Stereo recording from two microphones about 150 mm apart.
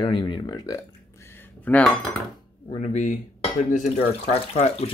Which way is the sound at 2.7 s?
50° left (ahead or behind).